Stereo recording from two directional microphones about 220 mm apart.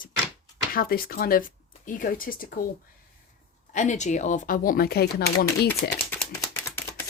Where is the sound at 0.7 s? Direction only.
40° left (ahead or behind).